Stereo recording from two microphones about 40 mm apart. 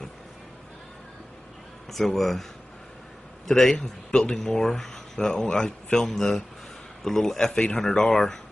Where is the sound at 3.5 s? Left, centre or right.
Centre.